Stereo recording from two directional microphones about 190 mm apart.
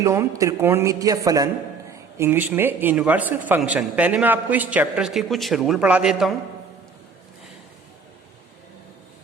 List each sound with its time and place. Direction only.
0.0 s a man's voice: 15° right (ahead or behind)